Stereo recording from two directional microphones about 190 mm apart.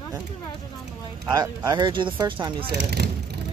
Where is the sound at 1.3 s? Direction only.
20° right (ahead or behind).